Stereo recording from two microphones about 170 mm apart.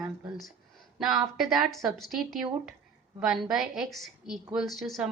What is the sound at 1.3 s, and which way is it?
A woman's voice, centre (ahead or behind).